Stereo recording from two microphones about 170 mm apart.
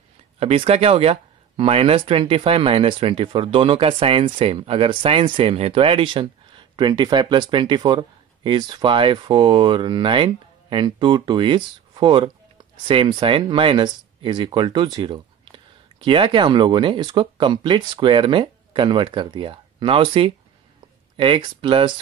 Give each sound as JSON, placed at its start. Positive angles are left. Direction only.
{"t": 0.4, "sound": "speech", "side_deg": -35}